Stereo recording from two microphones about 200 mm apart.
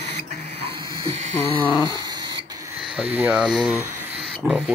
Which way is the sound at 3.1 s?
5° right (ahead or behind).